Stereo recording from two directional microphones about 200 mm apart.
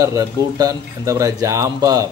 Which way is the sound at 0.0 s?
15° right (ahead or behind).